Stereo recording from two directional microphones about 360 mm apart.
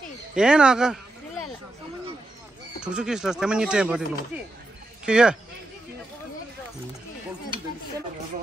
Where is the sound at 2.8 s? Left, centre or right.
Centre.